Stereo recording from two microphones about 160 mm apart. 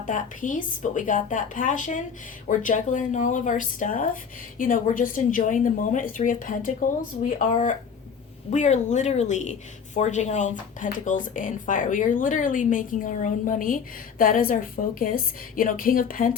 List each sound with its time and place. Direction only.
0.0 s a woman's voice: 55° left (ahead or behind)
8.4 s a woman's voice: 45° left (ahead or behind); by 16.4 s 60° left (ahead or behind)